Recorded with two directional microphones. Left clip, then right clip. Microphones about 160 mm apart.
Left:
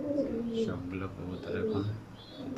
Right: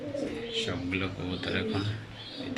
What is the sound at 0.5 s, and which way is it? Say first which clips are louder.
A man's voice: right 3 dB; 5° left (ahead or behind).